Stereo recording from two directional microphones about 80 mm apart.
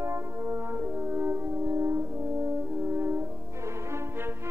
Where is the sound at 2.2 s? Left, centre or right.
Right.